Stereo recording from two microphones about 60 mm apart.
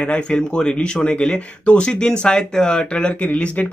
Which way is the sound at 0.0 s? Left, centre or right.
Centre.